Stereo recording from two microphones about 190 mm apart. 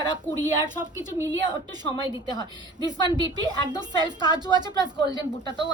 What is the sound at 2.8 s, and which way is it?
A woman's voice, 20° right (ahead or behind).